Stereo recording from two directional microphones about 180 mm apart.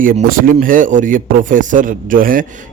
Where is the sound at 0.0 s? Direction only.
50° right (ahead or behind).